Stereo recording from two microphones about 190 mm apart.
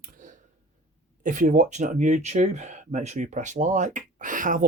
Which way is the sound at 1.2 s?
45° right (ahead or behind).